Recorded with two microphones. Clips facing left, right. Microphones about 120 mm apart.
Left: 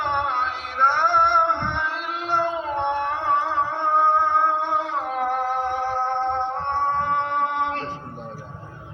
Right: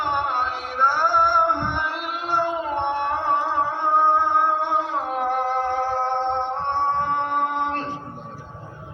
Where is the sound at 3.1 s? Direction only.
15° right (ahead or behind).